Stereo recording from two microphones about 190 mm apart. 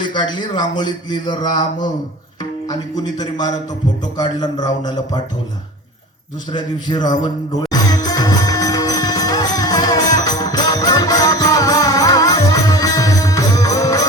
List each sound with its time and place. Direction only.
0.0 s speech: 25° left (ahead or behind)
3.2 s speech: 20° left (ahead or behind)
6.5 s speech: 20° left (ahead or behind)
7.7 s music: 20° left (ahead or behind)